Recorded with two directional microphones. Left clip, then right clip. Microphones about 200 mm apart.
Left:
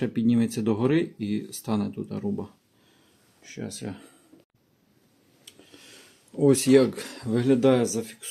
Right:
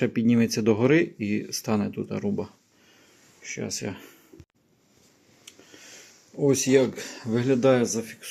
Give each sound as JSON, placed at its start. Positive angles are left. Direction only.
{"t": 0.0, "sound": "speech", "side_deg": -5}
{"t": 5.5, "sound": "a sound", "side_deg": 15}
{"t": 6.3, "sound": "speech", "side_deg": 30}